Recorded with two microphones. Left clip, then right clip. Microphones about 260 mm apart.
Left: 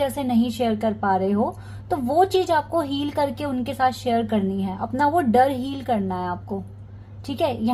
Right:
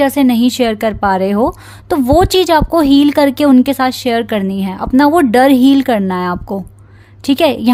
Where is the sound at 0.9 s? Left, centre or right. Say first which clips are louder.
Right 8 dB; right.